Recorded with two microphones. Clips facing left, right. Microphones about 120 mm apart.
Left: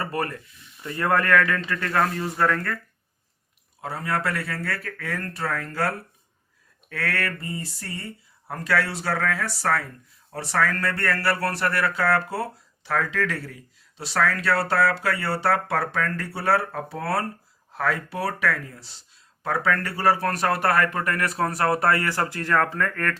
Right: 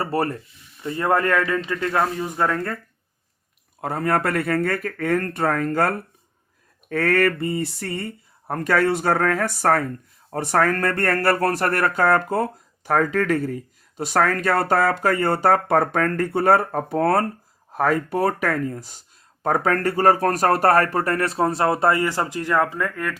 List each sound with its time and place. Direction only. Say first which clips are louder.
0.0 s speech: right 5 dB; 30° right (ahead or behind)
3.8 s speech: right 6 dB; 50° right (ahead or behind); by 23.1 s 15° right (ahead or behind)